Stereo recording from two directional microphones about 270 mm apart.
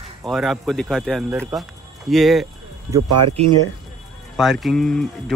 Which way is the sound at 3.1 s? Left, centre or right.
Right.